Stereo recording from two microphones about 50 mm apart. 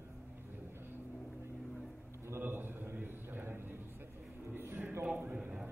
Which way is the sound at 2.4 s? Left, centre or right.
Right.